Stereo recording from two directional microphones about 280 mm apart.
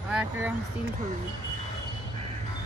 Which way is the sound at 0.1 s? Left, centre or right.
Centre.